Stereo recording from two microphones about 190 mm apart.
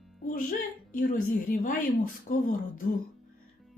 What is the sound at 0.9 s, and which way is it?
A woman's voice, 45° left (ahead or behind).